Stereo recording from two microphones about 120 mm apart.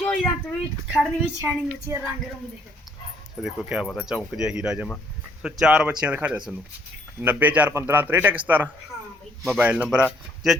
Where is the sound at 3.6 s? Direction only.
5° right (ahead or behind).